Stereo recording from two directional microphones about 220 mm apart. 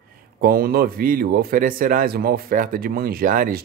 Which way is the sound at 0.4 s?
45° right (ahead or behind).